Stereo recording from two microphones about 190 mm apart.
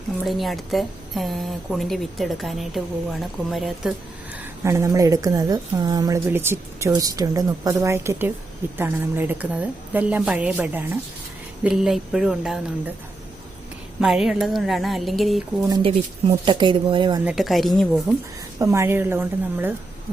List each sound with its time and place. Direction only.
0.3 s a woman's voice: centre (ahead or behind)
4.6 s a woman's voice: 15° right (ahead or behind)
14.0 s a woman's voice: centre (ahead or behind)
15.7 s speech: 30° right (ahead or behind)
17.2 s a woman's voice: centre (ahead or behind)
18.6 s a woman's voice: 15° right (ahead or behind)